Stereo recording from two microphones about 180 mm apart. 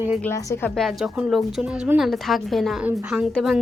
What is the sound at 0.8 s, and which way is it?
Speech, centre (ahead or behind).